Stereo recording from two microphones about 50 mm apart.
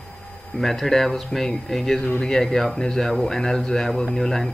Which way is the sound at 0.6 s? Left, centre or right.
Centre.